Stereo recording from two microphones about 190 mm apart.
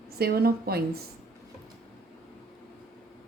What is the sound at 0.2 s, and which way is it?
Speech, 55° right (ahead or behind).